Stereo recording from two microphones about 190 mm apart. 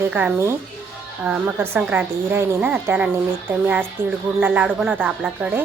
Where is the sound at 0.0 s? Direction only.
10° right (ahead or behind).